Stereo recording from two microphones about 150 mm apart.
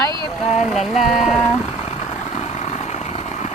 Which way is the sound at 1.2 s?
Centre (ahead or behind).